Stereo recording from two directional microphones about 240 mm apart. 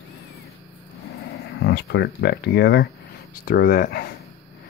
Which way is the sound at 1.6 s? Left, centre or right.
Left.